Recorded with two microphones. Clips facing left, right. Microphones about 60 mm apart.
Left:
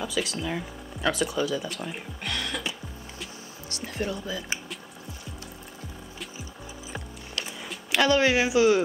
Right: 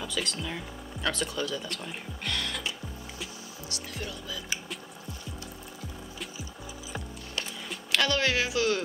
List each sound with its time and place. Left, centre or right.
0.0 s speech: centre
3.7 s speech: left
7.9 s speech: centre